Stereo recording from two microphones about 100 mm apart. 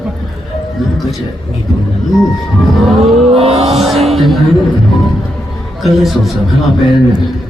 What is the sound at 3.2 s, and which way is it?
Vehicle, 90° right.